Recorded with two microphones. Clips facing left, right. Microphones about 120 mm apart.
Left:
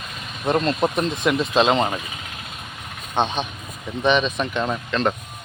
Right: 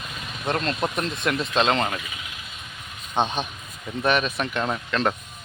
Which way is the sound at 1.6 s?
15° left (ahead or behind).